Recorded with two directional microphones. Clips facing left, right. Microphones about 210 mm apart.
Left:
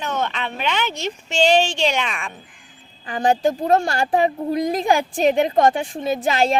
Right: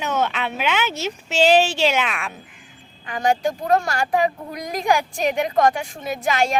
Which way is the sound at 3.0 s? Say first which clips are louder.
Left 2 dB; 30° left (ahead or behind).